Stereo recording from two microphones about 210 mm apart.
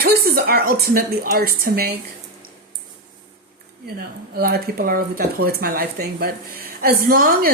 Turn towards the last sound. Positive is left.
turn(degrees=-45)  # may be behind; listen again after turning